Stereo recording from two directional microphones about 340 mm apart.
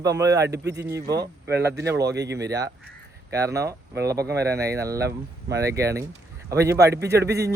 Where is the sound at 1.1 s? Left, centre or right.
Right.